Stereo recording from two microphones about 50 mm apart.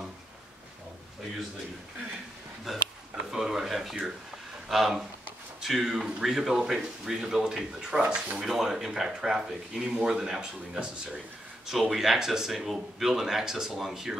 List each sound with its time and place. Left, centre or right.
2.7 s speech: centre; by 8.5 s right
8.5 s speech: centre